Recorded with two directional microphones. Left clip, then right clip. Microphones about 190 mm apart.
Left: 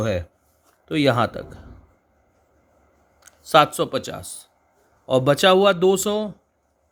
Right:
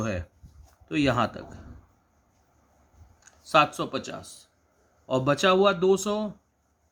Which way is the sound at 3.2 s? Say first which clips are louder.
Left 6 dB; 35° left (ahead or behind).